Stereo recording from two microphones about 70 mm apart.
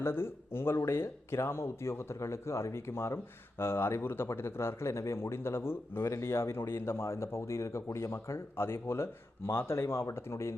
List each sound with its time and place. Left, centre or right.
0.0 s speech: left